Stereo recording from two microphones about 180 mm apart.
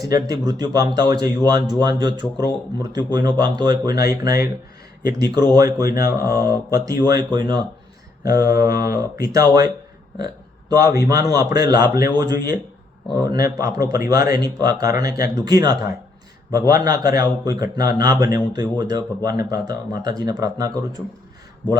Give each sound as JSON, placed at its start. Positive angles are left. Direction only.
{"t": 0.0, "sound": "speech", "side_deg": -20}
{"t": 8.2, "sound": "mantra", "side_deg": -20}
{"t": 8.9, "sound": "speech", "side_deg": -20}
{"t": 13.6, "sound": "speech", "side_deg": -20}